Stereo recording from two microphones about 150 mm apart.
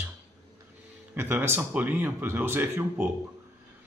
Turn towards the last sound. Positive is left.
turn(degrees=-15)  # may be behind; listen again after turning